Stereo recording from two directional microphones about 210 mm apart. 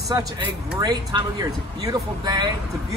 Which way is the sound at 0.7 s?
20° right (ahead or behind).